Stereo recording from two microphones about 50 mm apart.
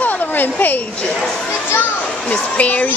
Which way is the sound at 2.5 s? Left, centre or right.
Left.